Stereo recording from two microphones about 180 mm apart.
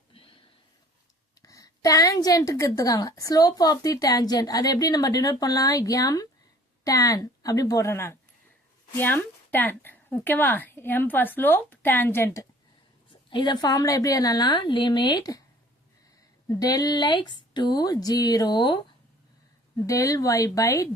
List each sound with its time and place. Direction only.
0.1 s a sound: 30° left (ahead or behind)
1.4 s a woman's voice: 20° left (ahead or behind)
16.5 s a woman's voice: 20° left (ahead or behind)